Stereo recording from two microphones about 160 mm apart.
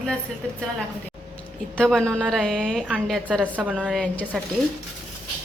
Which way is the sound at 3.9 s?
5° left (ahead or behind).